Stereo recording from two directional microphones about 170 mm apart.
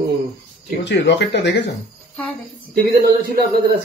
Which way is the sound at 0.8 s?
90° left.